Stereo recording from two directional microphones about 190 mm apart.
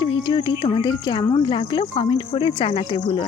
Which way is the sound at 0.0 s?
25° left (ahead or behind).